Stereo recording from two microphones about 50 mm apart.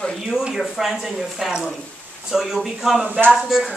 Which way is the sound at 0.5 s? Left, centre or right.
Centre.